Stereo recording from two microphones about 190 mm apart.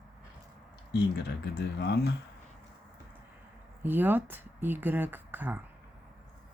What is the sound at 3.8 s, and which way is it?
Speech, 10° right (ahead or behind).